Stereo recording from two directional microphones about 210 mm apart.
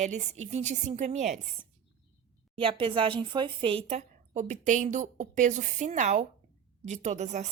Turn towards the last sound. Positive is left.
turn(degrees=-35)  # may be behind; listen again after turning